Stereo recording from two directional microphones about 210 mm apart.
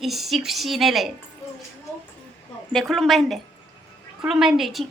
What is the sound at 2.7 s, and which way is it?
A woman's voice, centre (ahead or behind).